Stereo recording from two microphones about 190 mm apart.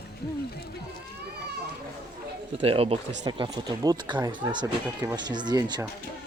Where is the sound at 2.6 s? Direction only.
30° right (ahead or behind).